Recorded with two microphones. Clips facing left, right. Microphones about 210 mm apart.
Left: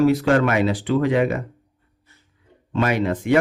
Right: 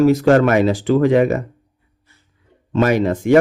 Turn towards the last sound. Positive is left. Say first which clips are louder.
# right 5 dB
turn(degrees=-40)  # may be behind; listen again after turning